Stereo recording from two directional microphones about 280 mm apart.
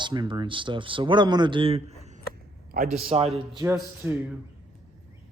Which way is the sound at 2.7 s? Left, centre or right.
Right.